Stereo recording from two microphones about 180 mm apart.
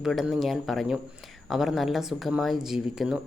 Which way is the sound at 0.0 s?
Centre (ahead or behind).